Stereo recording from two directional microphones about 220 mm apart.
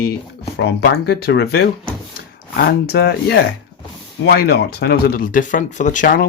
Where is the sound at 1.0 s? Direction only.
45° left (ahead or behind).